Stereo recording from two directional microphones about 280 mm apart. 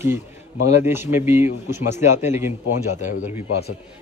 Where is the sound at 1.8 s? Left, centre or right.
Left.